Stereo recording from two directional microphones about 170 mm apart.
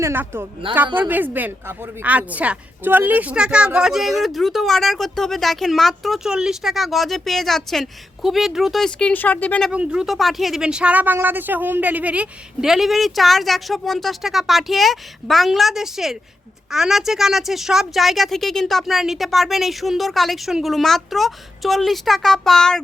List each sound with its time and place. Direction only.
0.0 s speech: 15° right (ahead or behind)
0.6 s a woman's voice: 30° right (ahead or behind)
0.9 s speech: 10° right (ahead or behind); by 9.7 s 5° left (ahead or behind)
9.7 s speech: 5° right (ahead or behind)